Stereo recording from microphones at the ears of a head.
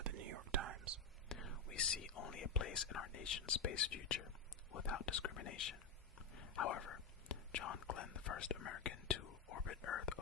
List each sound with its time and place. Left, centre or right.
0.0 s whispering: right
1.3 s speech: left
4.7 s whispering: left